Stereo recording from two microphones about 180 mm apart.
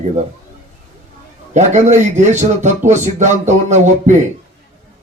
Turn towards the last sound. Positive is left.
turn(degrees=-40)  # may be behind; listen again after turning